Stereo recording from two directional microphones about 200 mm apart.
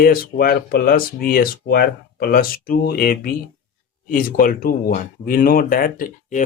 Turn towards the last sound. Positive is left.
turn(degrees=40)  # may be behind; listen again after turning